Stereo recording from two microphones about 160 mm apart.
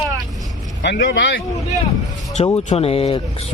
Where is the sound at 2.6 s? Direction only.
40° left (ahead or behind).